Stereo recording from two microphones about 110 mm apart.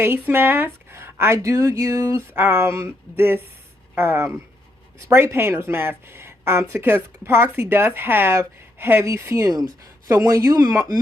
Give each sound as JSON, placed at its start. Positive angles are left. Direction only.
{"t": 0.0, "sound": "speech", "side_deg": -20}